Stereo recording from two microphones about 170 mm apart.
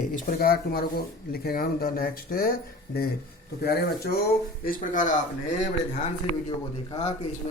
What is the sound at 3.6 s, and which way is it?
Speech, 70° left (ahead or behind).